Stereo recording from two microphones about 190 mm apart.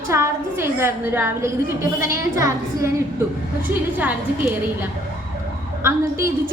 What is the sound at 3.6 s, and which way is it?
A woman's voice, 10° right (ahead or behind).